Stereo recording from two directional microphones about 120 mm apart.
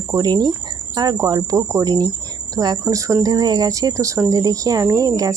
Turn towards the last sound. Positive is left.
turn(degrees=-30)  # may be behind; listen again after turning